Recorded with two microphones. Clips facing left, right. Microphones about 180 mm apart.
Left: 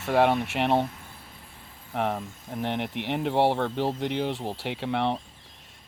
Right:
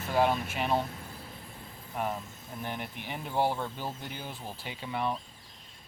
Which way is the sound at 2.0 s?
70° left (ahead or behind).